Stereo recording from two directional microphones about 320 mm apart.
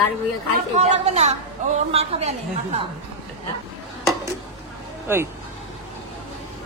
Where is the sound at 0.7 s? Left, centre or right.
Right.